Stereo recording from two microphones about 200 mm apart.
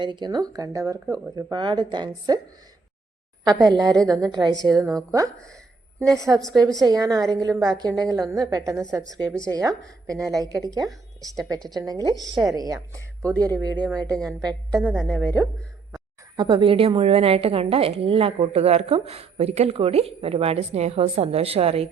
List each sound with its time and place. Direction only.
0.0 s a woman's voice: 20° right (ahead or behind)
3.4 s a woman's voice: 20° right (ahead or behind)
6.0 s a woman's voice: 15° right (ahead or behind)
16.4 s a woman's voice: 25° right (ahead or behind)